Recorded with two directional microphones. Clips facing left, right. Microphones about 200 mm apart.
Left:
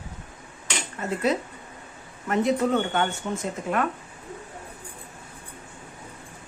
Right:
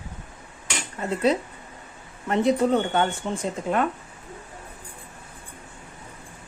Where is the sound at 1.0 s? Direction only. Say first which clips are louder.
Right 2 dB; 30° right (ahead or behind).